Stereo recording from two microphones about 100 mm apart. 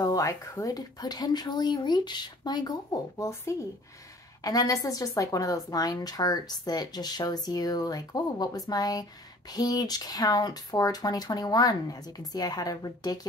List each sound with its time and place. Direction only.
0.0 s speech: 35° left (ahead or behind)
3.3 s a woman's voice: 30° left (ahead or behind)